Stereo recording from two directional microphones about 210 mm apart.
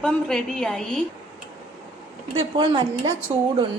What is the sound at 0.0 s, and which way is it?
A woman's voice, 5° left (ahead or behind).